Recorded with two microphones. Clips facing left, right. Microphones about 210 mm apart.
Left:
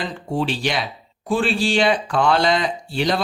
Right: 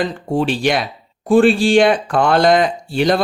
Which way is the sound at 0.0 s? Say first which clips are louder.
Right 6 dB; 50° right (ahead or behind).